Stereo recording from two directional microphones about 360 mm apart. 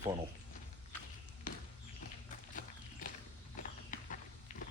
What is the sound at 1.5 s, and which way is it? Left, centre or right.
Basketball bounce, left.